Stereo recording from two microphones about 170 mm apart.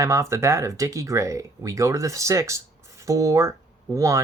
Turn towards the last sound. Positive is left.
turn(degrees=-20)  # may be behind; listen again after turning